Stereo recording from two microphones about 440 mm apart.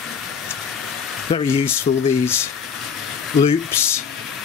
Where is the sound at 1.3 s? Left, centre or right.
Centre.